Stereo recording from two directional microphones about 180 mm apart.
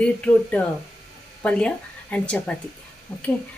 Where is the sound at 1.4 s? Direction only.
5° left (ahead or behind).